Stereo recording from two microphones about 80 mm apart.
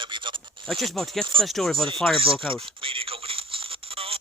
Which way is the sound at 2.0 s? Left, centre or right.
Left.